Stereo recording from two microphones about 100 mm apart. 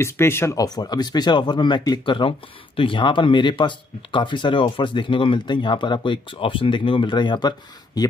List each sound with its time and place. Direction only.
0.0 s speech: 25° left (ahead or behind); by 8.1 s 45° left (ahead or behind)